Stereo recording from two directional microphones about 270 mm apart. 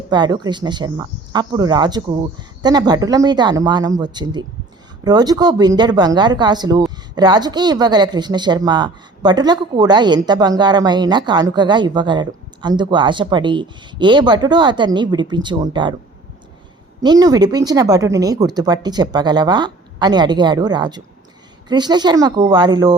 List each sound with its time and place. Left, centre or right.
0.1 s speech: centre
17.0 s speech: centre